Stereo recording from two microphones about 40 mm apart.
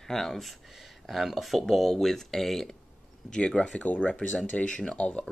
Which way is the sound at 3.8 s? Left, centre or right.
Left.